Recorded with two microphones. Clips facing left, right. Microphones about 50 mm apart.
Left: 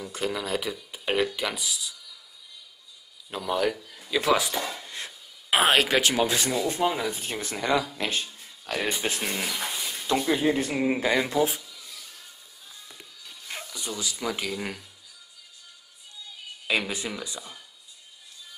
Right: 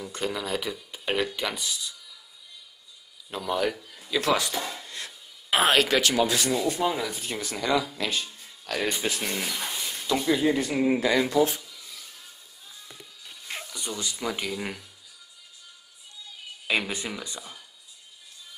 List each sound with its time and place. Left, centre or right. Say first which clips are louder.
0.0 s speech: left 1 dB; centre
3.3 s speech: left 1 dB; centre
4.8 s a sound: left 1 dB; left
6.7 s speech: left 1 dB; left
9.2 s speech: left 1 dB; centre
10.2 s speech: right 2 dB; left
11.4 s a sound: even; centre
13.7 s speech: left 1 dB; centre
16.6 s speech: even; centre